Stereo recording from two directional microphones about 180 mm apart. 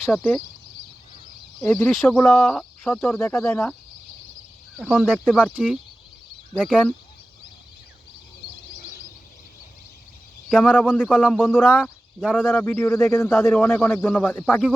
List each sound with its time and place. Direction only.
0.1 s speech: 10° left (ahead or behind)
1.6 s speech: 10° left (ahead or behind)
4.8 s speech: centre (ahead or behind)
10.8 s speech: 10° left (ahead or behind)
11.0 s speech: 5° right (ahead or behind)
11.3 s speech: 10° left (ahead or behind)
11.6 s speech: 5° right (ahead or behind)
12.2 s speech: 5° left (ahead or behind)
13.3 s speech: centre (ahead or behind)